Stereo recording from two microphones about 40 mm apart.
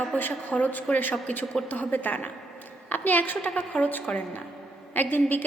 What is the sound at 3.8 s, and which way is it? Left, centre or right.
A woman's voice, left.